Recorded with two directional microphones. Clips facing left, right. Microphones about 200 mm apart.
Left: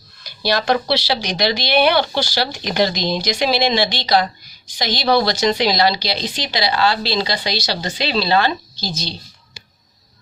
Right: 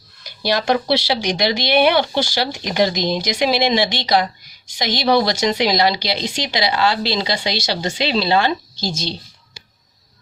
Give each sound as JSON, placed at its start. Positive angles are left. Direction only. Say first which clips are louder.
{"t": 0.3, "sound": "speech", "louder": "even", "side_deg": -20}